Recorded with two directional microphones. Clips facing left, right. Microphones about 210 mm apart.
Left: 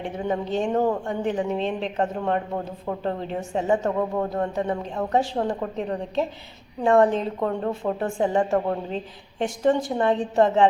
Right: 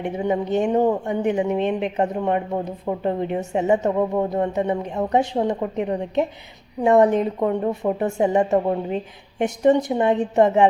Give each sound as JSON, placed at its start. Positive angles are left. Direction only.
{"t": 0.2, "sound": "a woman's voice", "side_deg": -15}